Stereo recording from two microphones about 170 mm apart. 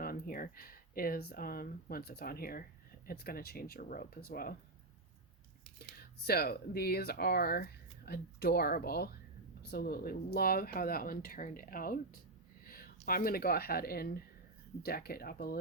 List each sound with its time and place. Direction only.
0.0 s speech: 60° left (ahead or behind)
6.0 s speech: 65° left (ahead or behind)